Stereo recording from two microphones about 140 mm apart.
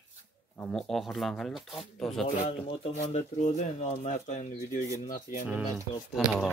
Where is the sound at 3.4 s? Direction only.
60° left (ahead or behind).